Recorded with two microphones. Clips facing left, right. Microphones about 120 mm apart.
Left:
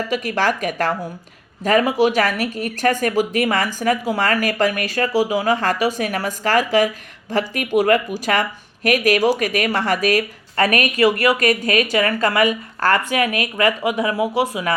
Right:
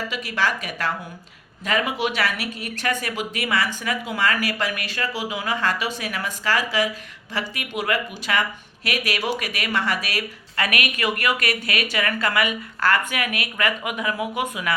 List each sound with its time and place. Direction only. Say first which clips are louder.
0.1 s speech: left 6 dB; 45° left (ahead or behind); by 14.7 s 30° left (ahead or behind)